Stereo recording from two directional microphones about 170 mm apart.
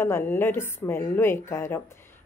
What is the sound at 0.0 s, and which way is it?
Speech, 15° left (ahead or behind).